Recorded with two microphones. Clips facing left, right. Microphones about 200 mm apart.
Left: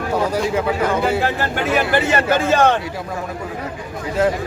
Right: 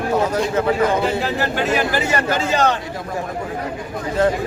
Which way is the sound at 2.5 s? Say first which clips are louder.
Left 3 dB; 55° left (ahead or behind).